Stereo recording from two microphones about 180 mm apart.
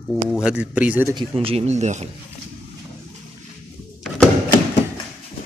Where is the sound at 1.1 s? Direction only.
30° right (ahead or behind).